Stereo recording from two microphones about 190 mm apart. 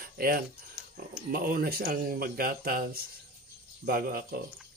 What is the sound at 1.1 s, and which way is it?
Speech, 50° right (ahead or behind).